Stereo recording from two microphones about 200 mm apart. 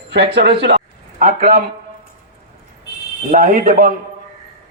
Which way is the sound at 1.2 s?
45° right (ahead or behind).